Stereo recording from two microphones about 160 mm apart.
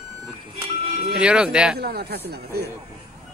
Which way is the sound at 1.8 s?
80° right.